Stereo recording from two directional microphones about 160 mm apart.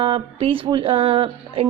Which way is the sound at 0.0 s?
35° right (ahead or behind).